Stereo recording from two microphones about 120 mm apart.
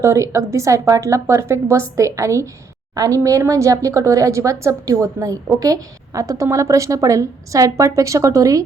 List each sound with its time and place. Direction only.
0.0 s speech: 25° right (ahead or behind)